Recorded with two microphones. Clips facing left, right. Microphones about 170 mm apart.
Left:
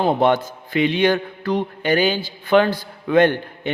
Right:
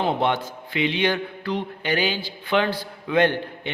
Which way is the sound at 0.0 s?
45° left (ahead or behind).